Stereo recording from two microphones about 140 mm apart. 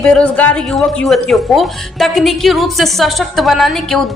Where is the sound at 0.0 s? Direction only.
5° left (ahead or behind).